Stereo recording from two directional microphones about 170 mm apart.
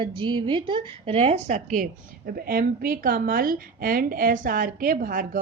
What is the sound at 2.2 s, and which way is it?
Speech, 60° right (ahead or behind).